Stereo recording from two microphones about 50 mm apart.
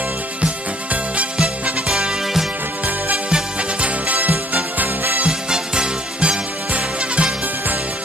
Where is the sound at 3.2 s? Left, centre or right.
Right.